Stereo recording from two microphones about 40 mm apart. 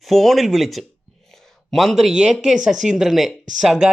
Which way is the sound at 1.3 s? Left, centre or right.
Centre.